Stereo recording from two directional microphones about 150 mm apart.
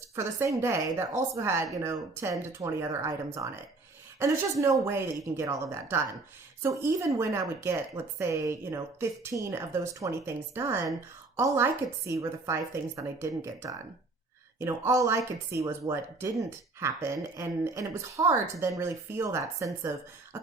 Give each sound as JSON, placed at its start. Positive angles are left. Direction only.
{"t": 0.2, "sound": "a woman's voice", "side_deg": -20}